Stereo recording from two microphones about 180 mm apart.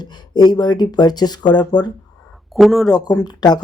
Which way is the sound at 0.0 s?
25° left (ahead or behind).